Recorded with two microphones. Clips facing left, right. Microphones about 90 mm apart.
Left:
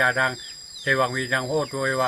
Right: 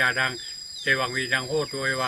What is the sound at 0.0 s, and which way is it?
Speech, 20° left (ahead or behind).